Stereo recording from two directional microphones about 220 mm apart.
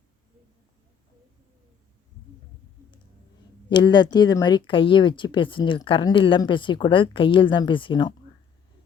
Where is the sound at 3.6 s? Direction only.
20° left (ahead or behind).